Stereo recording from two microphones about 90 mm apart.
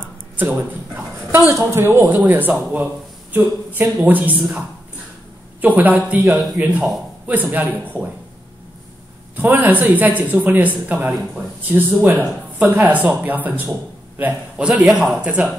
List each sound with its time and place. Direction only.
0.4 s a sound: 20° right (ahead or behind)
1.5 s speech: 35° right (ahead or behind); by 4.5 s 20° right (ahead or behind)
5.6 s speech: 20° right (ahead or behind)
9.4 s a man's voice: 20° right (ahead or behind)